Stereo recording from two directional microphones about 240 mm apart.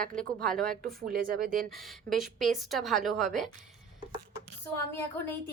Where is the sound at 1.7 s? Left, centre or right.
Centre.